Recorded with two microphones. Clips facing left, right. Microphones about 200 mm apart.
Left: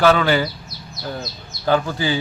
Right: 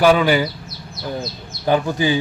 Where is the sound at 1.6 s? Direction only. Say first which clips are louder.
Right 2 dB; 15° right (ahead or behind).